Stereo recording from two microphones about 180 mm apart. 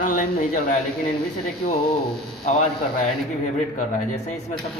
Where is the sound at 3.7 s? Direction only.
40° left (ahead or behind).